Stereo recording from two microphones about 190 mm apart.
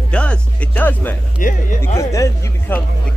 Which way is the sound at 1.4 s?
45° left (ahead or behind).